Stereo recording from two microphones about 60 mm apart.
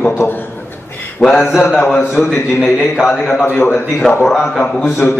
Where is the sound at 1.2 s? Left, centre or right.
Centre.